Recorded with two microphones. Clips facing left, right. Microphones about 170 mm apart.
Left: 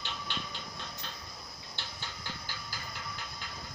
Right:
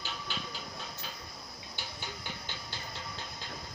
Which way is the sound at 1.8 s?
15° right (ahead or behind).